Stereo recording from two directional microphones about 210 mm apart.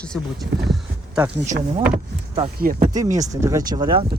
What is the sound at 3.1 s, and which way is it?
Speech, 15° right (ahead or behind).